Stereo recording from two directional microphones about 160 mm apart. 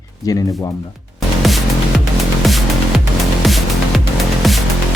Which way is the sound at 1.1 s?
Centre (ahead or behind).